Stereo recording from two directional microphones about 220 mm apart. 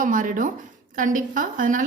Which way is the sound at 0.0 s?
35° right (ahead or behind).